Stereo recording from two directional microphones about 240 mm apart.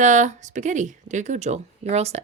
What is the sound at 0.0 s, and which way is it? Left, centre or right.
Speech, right.